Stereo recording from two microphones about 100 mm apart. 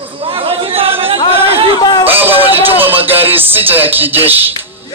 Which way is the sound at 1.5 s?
70° right (ahead or behind).